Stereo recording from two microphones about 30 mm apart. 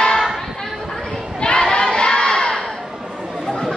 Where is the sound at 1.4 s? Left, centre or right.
Left.